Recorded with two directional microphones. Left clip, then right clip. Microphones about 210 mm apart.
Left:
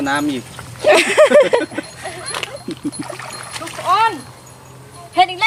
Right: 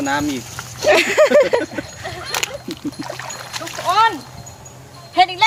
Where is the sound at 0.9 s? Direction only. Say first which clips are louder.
Left 2 dB; 10° left (ahead or behind).